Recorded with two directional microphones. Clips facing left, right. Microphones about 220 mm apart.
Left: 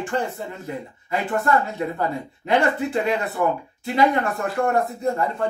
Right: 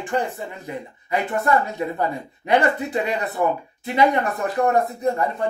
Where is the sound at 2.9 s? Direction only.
20° right (ahead or behind).